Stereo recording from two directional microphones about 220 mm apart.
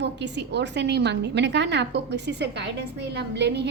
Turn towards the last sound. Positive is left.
turn(degrees=-50)  # may be behind; listen again after turning